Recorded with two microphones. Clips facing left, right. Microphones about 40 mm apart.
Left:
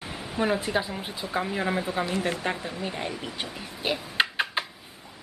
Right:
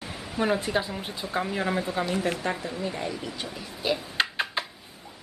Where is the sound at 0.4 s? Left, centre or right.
Centre.